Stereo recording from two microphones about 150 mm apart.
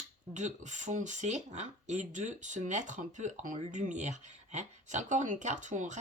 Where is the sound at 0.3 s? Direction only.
55° right (ahead or behind).